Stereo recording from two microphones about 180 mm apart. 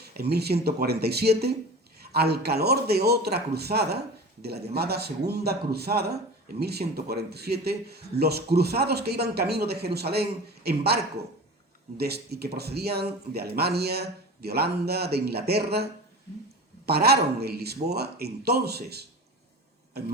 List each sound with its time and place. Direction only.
0.0 s a man's voice: 60° right (ahead or behind)